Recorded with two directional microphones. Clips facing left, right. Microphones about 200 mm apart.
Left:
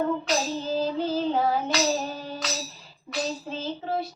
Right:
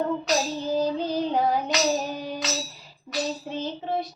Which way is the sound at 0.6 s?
15° right (ahead or behind).